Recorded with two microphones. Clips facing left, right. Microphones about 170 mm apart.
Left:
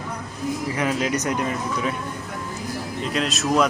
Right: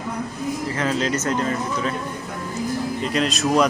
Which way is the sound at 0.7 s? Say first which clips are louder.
Even; 10° left (ahead or behind).